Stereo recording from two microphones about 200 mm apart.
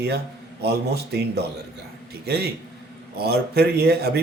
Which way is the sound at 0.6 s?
55° right (ahead or behind).